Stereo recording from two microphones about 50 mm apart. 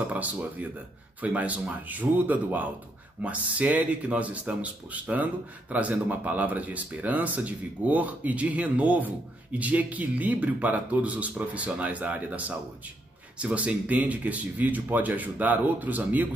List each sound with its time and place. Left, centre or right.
0.1 s speech: right